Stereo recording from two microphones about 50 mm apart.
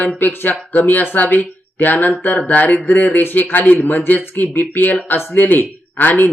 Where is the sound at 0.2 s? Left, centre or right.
Left.